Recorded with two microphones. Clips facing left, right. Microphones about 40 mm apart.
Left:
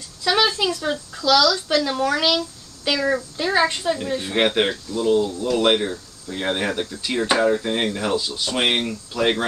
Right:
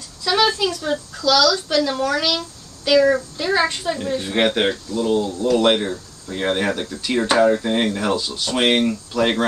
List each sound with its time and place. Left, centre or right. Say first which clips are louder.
0.2 s a sound: right 1 dB; centre
1.1 s a child's voice: right 1 dB; centre
3.0 s a child's voice: right 6 dB; centre